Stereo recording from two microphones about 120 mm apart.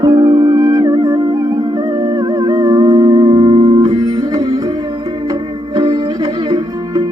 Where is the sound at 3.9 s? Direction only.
30° right (ahead or behind).